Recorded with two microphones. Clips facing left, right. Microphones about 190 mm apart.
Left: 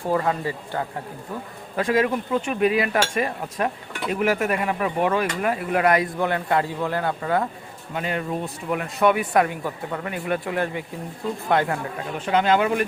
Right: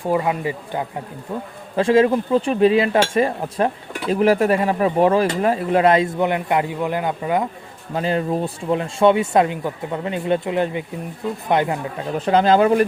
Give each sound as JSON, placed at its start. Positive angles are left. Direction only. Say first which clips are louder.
{"t": 0.0, "sound": "speech", "louder": "right 3 dB", "side_deg": -15}
{"t": 1.7, "sound": "speech", "louder": "right 6 dB", "side_deg": -30}
{"t": 7.9, "sound": "speech", "louder": "right 6 dB", "side_deg": -30}
{"t": 12.1, "sound": "speech", "louder": "right 5 dB", "side_deg": -35}